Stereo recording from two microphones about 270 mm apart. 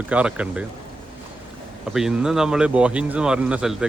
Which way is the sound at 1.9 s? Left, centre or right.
Centre.